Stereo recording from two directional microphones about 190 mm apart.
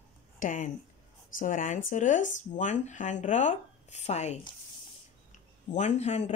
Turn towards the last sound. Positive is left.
turn(degrees=35)  # may be behind; listen again after turning